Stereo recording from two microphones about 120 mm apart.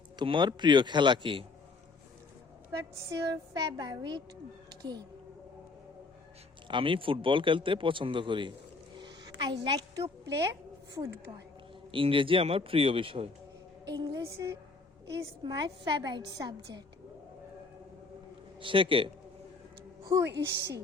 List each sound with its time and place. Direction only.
0.2 s a woman's voice: 40° right (ahead or behind)
3.1 s a woman's voice: 30° right (ahead or behind)
6.7 s a man's voice: 45° right (ahead or behind)
9.0 s a sound: 40° right (ahead or behind)
11.9 s a man's voice: 45° right (ahead or behind)
13.9 s a woman's voice: 30° right (ahead or behind)
15.0 s a woman's voice: 35° right (ahead or behind)
18.6 s a man's voice: 45° right (ahead or behind)
20.2 s a woman's voice: 20° right (ahead or behind)